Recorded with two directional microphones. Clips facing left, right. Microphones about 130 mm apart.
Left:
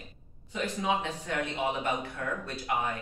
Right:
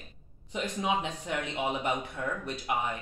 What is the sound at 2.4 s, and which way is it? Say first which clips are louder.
Speech: left 1 dB; 20° right (ahead or behind).